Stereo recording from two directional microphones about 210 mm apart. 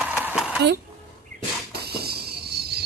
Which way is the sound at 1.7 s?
50° right (ahead or behind).